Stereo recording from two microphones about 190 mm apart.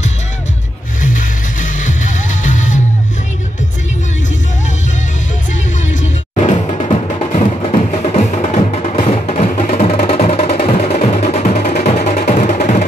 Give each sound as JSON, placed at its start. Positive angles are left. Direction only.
{"t": 1.0, "sound": "music", "side_deg": 40}
{"t": 6.3, "sound": "music", "side_deg": 35}